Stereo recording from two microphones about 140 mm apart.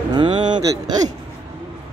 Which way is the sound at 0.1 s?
35° right (ahead or behind).